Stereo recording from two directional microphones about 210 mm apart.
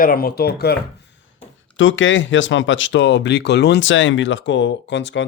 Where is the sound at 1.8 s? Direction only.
65° left (ahead or behind).